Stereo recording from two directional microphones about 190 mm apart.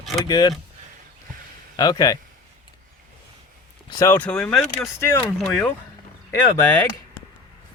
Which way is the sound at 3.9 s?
15° left (ahead or behind).